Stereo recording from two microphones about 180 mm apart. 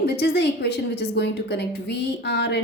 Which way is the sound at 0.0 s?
70° left (ahead or behind).